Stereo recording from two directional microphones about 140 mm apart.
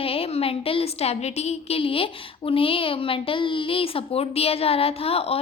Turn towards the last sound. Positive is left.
turn(degrees=45)  # may be behind; listen again after turning